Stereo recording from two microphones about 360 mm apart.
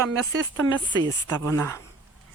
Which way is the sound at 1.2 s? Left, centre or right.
Centre.